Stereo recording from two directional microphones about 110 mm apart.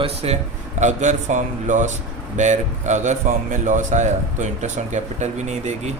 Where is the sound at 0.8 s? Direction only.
90° right.